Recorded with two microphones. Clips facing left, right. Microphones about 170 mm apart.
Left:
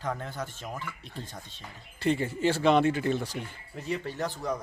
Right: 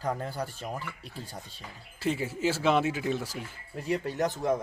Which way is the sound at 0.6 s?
10° right (ahead or behind).